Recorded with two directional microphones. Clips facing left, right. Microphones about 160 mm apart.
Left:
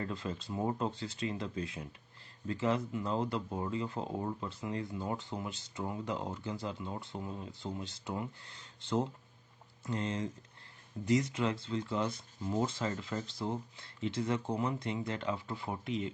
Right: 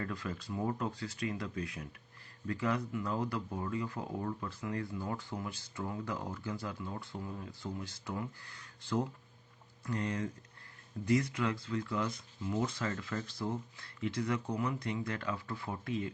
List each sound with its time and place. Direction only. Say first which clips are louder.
0.0 s speech: left 1 dB; 25° left (ahead or behind)